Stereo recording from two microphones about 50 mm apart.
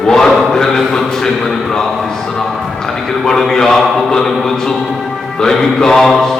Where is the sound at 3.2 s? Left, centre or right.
Centre.